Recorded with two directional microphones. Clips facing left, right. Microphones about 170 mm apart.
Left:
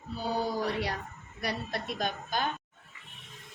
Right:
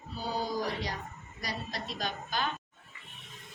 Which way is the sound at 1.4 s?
60° left (ahead or behind).